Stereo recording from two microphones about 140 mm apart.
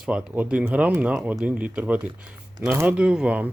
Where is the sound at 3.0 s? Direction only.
5° right (ahead or behind).